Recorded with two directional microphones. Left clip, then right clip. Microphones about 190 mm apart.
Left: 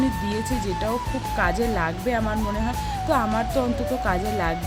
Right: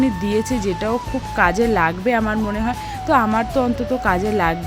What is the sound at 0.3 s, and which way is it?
Speech, 15° right (ahead or behind).